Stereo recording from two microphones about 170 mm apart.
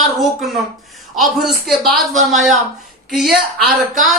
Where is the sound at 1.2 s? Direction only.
Centre (ahead or behind).